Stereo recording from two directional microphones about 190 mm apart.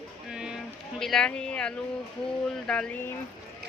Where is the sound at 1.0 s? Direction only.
5° left (ahead or behind).